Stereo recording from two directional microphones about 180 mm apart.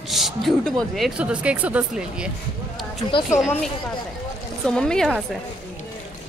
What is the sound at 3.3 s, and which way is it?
A woman's voice, 5° right (ahead or behind).